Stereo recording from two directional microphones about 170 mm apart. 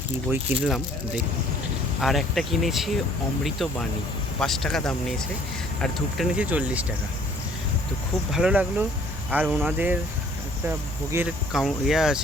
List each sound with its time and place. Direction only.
0.3 s speech: 5° right (ahead or behind)
8.3 s speech: 5° right (ahead or behind)
11.1 s speech: 15° right (ahead or behind)
11.5 s speech: centre (ahead or behind)